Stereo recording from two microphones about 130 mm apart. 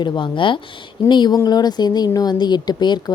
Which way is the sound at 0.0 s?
40° left (ahead or behind).